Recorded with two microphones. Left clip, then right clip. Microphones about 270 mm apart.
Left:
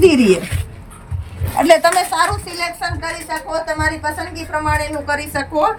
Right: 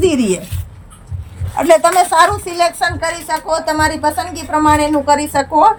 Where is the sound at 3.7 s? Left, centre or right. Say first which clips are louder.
Right 6 dB; left.